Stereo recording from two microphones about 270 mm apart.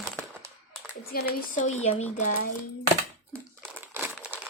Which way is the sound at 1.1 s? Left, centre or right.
Left.